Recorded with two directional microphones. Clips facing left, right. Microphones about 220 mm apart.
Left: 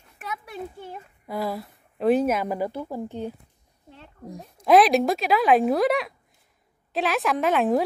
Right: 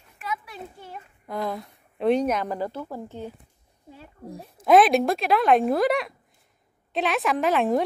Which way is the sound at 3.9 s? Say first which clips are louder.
Right 1 dB; 5° right (ahead or behind).